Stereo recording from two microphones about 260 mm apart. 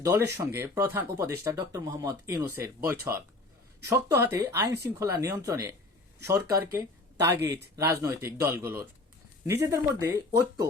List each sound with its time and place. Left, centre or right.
0.0 s speech: centre
7.3 s speech: right
7.8 s speech: centre